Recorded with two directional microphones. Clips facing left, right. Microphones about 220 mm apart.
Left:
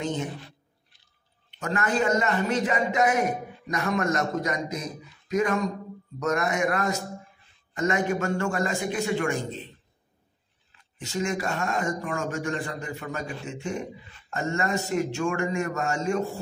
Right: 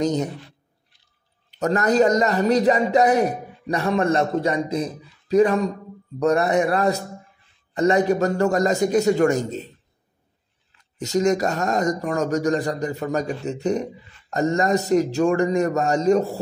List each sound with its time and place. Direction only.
0.0 s a man's voice: 40° right (ahead or behind)
1.6 s a man's voice: 40° right (ahead or behind)
11.0 s a man's voice: 40° right (ahead or behind)